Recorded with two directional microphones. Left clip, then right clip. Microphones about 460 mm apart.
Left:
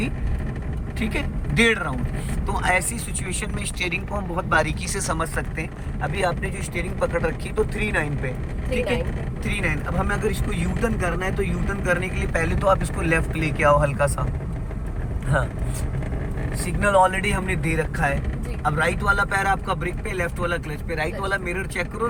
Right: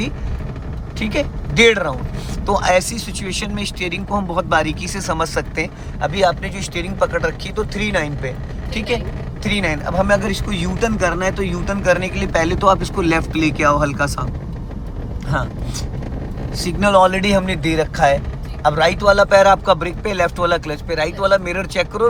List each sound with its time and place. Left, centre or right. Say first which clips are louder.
0.9 s speech: right 8 dB; centre
9.4 s speech: right 6 dB; centre
15.3 s speech: right 2 dB; centre
16.6 s speech: right 5 dB; centre